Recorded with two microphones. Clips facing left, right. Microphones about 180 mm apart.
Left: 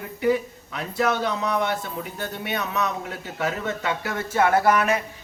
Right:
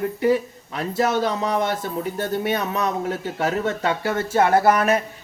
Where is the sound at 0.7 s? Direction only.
40° right (ahead or behind).